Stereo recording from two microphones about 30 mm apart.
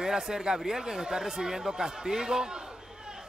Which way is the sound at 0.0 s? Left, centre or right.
Centre.